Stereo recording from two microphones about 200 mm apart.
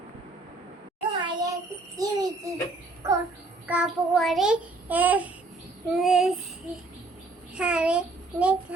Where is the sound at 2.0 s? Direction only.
20° right (ahead or behind).